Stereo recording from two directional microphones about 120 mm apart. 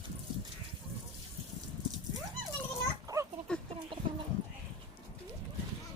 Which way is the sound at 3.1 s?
30° right (ahead or behind).